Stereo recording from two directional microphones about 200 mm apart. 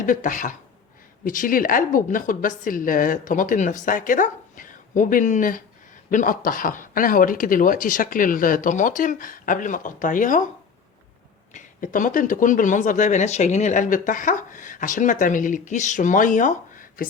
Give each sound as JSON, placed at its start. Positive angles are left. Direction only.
{"t": 0.0, "sound": "speech", "side_deg": 40}
{"t": 11.5, "sound": "speech", "side_deg": 40}